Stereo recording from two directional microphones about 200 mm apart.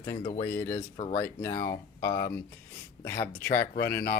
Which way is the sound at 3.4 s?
45° left (ahead or behind).